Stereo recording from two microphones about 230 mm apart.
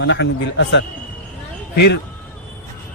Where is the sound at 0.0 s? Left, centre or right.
Left.